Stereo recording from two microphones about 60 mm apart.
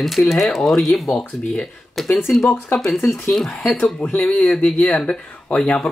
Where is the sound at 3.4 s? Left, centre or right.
Centre.